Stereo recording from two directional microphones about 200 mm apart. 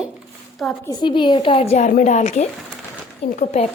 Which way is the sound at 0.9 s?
20° left (ahead or behind).